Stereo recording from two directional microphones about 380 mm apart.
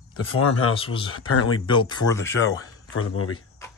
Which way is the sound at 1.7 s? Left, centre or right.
Centre.